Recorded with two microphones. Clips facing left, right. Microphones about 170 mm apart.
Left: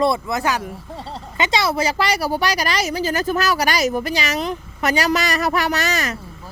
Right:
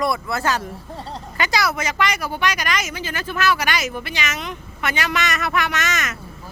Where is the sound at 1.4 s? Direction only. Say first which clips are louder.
Left 3 dB; 25° left (ahead or behind).